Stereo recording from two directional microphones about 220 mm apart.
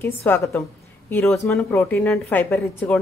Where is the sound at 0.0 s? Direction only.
10° left (ahead or behind).